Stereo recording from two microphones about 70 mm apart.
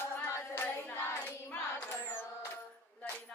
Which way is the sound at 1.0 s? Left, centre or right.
Left.